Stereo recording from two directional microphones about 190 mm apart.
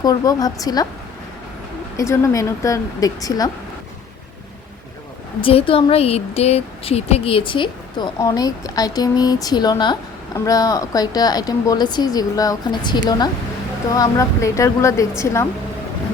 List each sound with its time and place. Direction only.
0.0 s speech: 20° left (ahead or behind)
2.0 s a woman's voice: 15° left (ahead or behind)
5.4 s a woman's voice: 30° left (ahead or behind)